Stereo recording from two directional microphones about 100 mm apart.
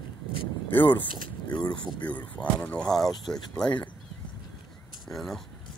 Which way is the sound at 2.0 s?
15° left (ahead or behind).